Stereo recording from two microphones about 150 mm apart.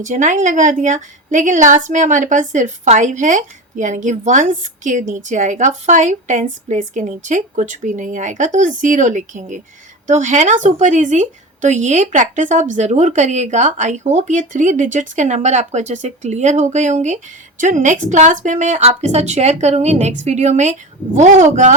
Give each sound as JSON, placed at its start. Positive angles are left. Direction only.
{"t": 0.0, "sound": "a woman's voice", "side_deg": -55}